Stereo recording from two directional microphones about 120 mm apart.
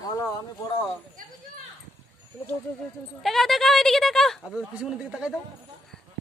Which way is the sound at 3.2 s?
Centre (ahead or behind).